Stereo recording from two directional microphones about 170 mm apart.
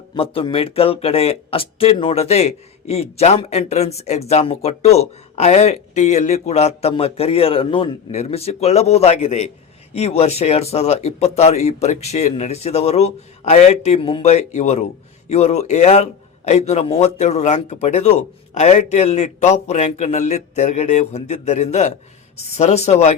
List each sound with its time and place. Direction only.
0.1 s speech: 30° left (ahead or behind)